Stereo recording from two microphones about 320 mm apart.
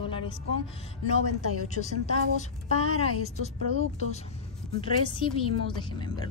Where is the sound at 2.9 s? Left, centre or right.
Left.